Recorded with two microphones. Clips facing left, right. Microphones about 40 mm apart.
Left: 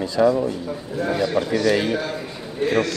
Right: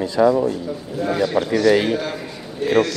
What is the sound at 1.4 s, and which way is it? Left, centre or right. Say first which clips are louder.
Speech: right 3 dB; centre.